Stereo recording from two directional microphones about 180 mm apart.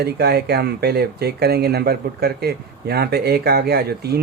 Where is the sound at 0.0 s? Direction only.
65° right (ahead or behind).